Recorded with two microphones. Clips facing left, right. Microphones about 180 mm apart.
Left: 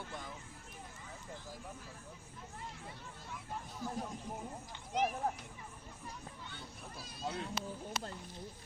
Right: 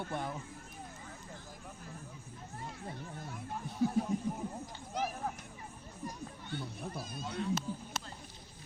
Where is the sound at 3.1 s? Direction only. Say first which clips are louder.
Right 3 dB; 60° right (ahead or behind).